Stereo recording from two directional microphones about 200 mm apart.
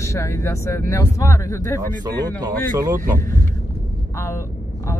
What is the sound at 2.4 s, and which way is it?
Speech, 20° right (ahead or behind).